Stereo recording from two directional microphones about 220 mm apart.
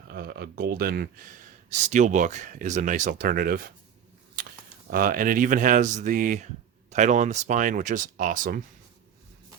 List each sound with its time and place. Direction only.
0.1 s speech: 45° right (ahead or behind)
4.4 s a sound: 40° right (ahead or behind)
4.9 s speech: 40° right (ahead or behind)